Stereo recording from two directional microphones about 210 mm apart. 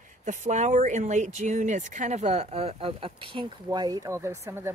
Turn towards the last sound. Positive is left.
turn(degrees=-10)  # may be behind; listen again after turning